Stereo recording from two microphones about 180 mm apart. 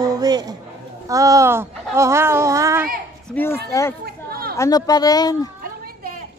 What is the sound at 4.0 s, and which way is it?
Chatter, 55° right (ahead or behind).